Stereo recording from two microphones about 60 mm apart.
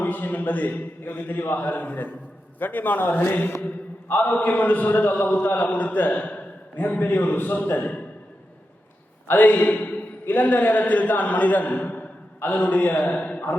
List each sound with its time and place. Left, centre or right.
0.0 s a man's voice: left
9.2 s a man's voice: left
13.1 s a sound: left